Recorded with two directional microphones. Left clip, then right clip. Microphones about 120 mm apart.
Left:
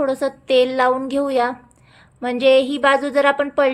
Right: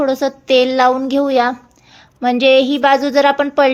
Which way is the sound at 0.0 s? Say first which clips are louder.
Right 4 dB; 30° right (ahead or behind).